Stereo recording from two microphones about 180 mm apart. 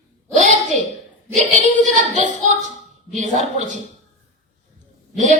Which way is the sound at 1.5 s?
45° right (ahead or behind).